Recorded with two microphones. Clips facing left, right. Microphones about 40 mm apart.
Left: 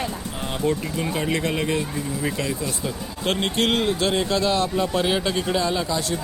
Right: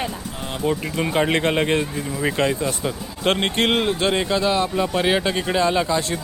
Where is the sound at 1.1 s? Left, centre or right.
Right.